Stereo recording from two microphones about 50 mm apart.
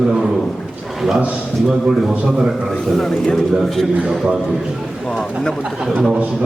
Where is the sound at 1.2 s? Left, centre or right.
Right.